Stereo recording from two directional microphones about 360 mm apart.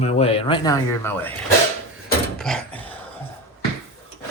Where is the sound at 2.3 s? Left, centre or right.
Centre.